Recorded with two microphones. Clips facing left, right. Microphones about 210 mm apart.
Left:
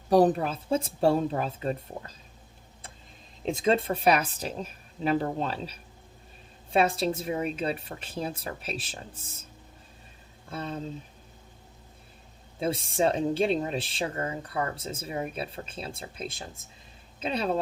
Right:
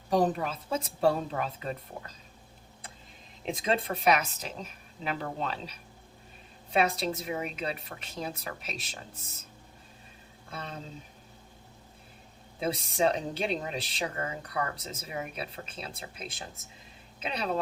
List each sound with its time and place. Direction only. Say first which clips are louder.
0.1 s a woman's voice: left 5 dB; 35° left (ahead or behind)
3.4 s a woman's voice: left 5 dB; 30° left (ahead or behind)
6.7 s a woman's voice: left 3 dB; 30° left (ahead or behind)
12.5 s speech: left 2 dB; 30° left (ahead or behind)